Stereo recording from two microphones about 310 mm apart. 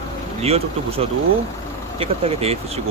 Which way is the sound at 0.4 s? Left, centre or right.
Centre.